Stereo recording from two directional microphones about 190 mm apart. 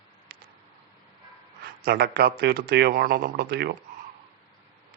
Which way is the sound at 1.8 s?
55° right (ahead or behind).